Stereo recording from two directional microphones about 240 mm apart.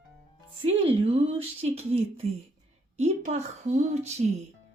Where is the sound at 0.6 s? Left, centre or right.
Right.